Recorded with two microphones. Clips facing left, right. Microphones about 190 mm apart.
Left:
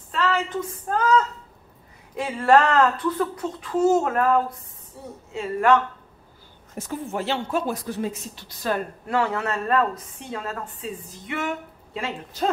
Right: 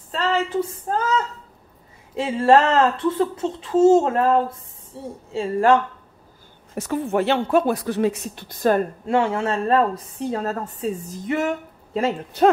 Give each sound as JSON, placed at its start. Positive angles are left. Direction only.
{"t": 0.1, "sound": "a sound", "side_deg": -30}
{"t": 2.1, "sound": "speech", "side_deg": -25}
{"t": 6.7, "sound": "speech", "side_deg": -70}
{"t": 9.0, "sound": "speech", "side_deg": -25}
{"t": 12.4, "sound": "speech", "side_deg": -65}